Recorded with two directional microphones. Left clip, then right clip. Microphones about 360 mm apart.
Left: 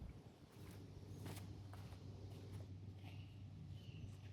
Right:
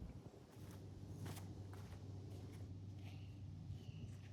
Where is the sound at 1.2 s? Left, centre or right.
Centre.